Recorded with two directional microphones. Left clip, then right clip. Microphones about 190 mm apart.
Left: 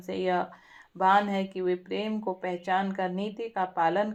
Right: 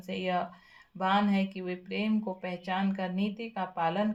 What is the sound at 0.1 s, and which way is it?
Speech, 25° left (ahead or behind).